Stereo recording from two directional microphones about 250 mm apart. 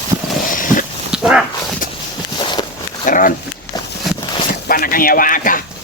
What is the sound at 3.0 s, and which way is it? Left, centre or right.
Speech, left.